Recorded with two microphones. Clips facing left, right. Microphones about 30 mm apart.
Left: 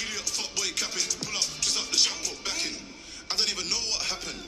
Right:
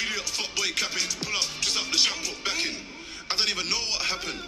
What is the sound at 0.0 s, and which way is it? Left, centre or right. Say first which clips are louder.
Music: right 4 dB; centre.